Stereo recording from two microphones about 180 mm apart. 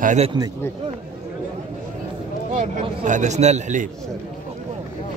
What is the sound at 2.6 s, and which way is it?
Speech, 45° right (ahead or behind).